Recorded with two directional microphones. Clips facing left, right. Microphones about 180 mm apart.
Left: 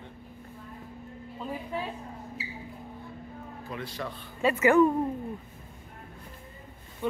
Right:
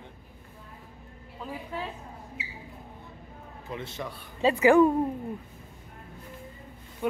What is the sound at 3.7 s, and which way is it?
Speech, 20° right (ahead or behind).